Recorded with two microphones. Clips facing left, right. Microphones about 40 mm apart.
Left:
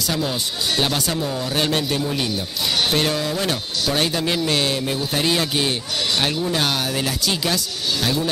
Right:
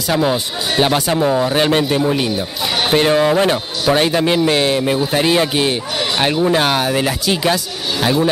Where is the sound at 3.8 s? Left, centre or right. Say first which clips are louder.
Right 7 dB; right.